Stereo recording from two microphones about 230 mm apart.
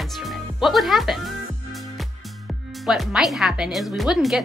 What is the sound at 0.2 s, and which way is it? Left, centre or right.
Speech, centre.